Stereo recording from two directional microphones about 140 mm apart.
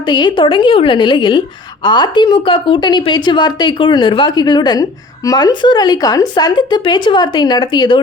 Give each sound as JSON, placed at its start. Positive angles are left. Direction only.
{"t": 0.1, "sound": "a woman's voice", "side_deg": 35}